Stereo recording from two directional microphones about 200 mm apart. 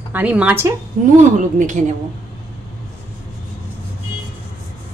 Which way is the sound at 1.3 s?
40° right (ahead or behind).